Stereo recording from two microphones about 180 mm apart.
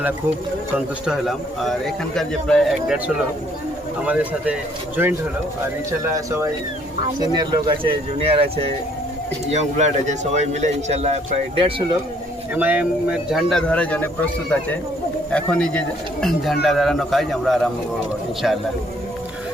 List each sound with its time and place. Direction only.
1.0 s a man's voice: centre (ahead or behind)
4.0 s speech: 10° right (ahead or behind)
6.1 s speech: 15° right (ahead or behind)
9.5 s a man's voice: 40° right (ahead or behind)
12.5 s a man's voice: 10° right (ahead or behind); by 14.1 s 5° left (ahead or behind)
15.3 s a man's voice: 5° left (ahead or behind)